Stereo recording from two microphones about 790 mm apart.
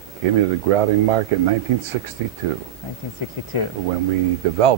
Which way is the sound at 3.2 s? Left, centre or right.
Left.